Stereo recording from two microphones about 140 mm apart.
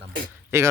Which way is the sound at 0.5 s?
20° right (ahead or behind).